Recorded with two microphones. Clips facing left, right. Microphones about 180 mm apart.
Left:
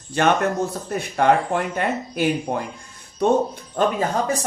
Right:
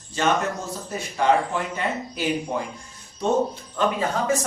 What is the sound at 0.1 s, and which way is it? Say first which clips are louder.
Speech: left 4 dB; 60° left (ahead or behind).